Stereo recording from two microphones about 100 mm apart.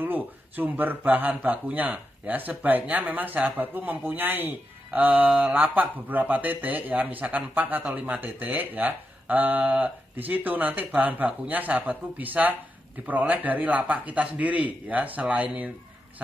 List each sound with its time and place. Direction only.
0.0 s speech: 20° right (ahead or behind)